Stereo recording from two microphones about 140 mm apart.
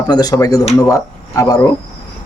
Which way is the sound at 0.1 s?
30° left (ahead or behind).